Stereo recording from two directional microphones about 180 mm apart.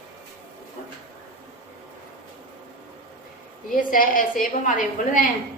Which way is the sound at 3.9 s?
50° left (ahead or behind).